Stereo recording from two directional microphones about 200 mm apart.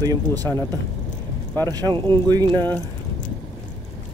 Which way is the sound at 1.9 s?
20° right (ahead or behind).